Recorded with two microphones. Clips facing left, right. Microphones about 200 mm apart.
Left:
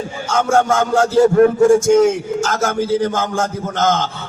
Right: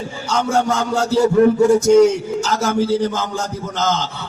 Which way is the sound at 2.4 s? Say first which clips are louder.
Right 2 dB; 50° left (ahead or behind).